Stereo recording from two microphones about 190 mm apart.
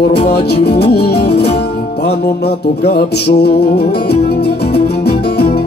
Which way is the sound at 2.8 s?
55° left (ahead or behind).